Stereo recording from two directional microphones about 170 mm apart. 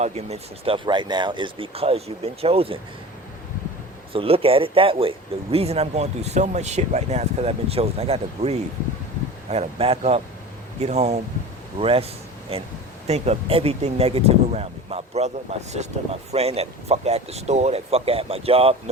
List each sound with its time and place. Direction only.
0.0 s speech: 40° right (ahead or behind)
4.1 s speech: 35° right (ahead or behind)
13.1 s speech: 40° right (ahead or behind)